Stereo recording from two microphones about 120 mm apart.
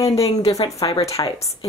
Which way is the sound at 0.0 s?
60° left (ahead or behind).